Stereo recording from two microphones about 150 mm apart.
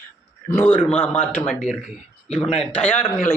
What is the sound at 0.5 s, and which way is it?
Speech, 10° left (ahead or behind).